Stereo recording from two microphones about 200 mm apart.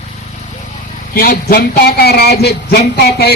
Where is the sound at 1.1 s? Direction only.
50° left (ahead or behind).